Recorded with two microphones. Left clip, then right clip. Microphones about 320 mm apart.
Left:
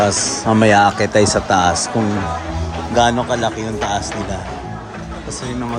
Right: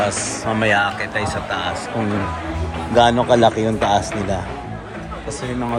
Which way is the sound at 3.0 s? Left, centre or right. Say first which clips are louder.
Right 2 dB; centre.